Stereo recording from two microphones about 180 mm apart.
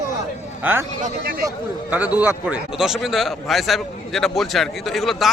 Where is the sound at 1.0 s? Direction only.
55° right (ahead or behind).